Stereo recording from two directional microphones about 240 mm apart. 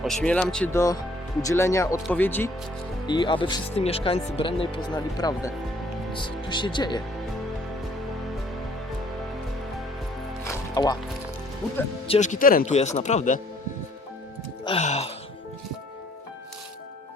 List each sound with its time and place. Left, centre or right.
0.0 s speech: centre
3.1 s speech: centre
10.4 s music: centre
12.0 s speech: left
14.6 s speech: left